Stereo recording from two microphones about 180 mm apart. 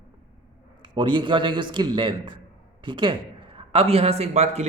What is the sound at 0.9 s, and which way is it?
A man's voice, 25° right (ahead or behind).